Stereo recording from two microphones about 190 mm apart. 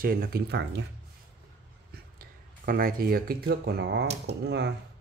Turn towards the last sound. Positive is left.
turn(degrees=-60)  # may be behind; listen again after turning